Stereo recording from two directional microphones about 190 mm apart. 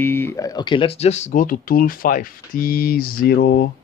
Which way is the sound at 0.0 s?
10° left (ahead or behind).